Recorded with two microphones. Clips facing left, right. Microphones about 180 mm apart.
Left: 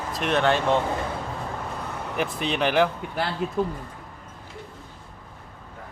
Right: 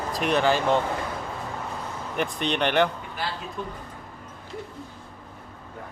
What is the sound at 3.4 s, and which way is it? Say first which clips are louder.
Speech: left 10 dB; 60° left (ahead or behind).